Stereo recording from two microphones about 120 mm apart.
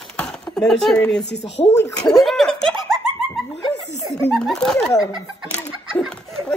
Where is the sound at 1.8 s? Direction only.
25° left (ahead or behind).